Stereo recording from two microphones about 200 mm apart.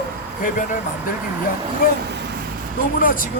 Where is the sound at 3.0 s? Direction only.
45° left (ahead or behind).